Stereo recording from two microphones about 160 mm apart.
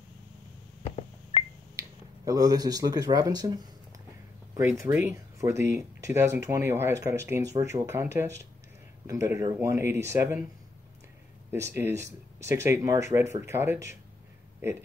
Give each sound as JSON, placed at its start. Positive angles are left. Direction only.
{"t": 0.8, "sound": "a sound", "side_deg": 35}
{"t": 1.8, "sound": "speech", "side_deg": -20}
{"t": 11.5, "sound": "speech", "side_deg": -15}